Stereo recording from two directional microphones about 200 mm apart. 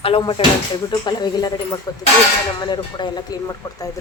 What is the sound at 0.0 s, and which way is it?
Speech, 25° left (ahead or behind).